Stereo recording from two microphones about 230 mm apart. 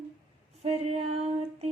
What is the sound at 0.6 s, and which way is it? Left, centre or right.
Female singing, right.